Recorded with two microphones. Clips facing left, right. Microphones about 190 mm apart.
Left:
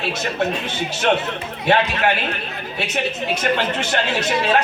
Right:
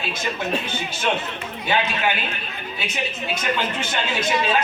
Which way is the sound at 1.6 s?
70° left (ahead or behind).